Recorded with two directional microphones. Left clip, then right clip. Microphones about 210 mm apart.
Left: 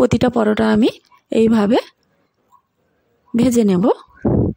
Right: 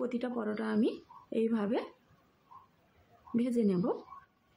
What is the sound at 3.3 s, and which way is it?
Speech, 50° left (ahead or behind).